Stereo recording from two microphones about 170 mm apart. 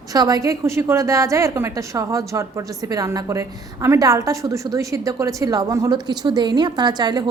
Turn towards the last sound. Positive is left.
turn(degrees=-25)  # may be behind; listen again after turning